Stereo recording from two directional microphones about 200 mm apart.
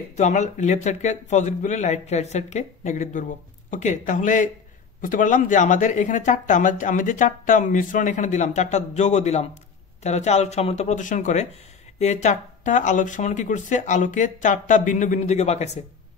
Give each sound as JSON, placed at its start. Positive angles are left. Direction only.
{"t": 0.1, "sound": "speech", "side_deg": 35}